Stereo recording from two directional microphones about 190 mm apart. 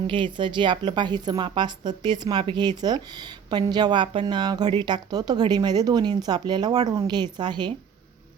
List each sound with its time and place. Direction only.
0.1 s a woman's voice: 25° right (ahead or behind)